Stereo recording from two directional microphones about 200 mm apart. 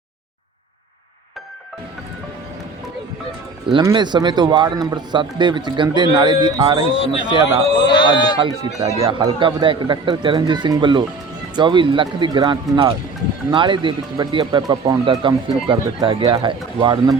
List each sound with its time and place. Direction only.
3.7 s speech: 25° right (ahead or behind)
7.9 s speech: 20° left (ahead or behind)
8.4 s speech: 20° right (ahead or behind)